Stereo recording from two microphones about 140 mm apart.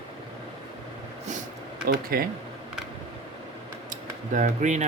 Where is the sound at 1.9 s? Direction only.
90° right.